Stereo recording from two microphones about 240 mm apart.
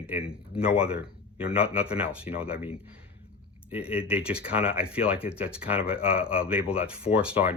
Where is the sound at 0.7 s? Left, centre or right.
Left.